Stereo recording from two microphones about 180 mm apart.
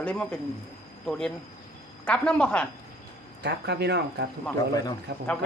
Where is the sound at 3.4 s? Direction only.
70° right (ahead or behind).